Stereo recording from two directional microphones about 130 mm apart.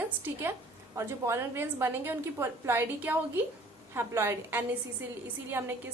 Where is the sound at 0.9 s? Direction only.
20° right (ahead or behind).